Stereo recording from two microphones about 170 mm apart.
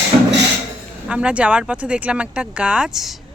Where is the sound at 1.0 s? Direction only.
5° right (ahead or behind).